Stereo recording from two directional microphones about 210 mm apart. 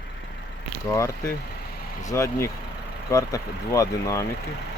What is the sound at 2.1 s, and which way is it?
Speech, 15° left (ahead or behind).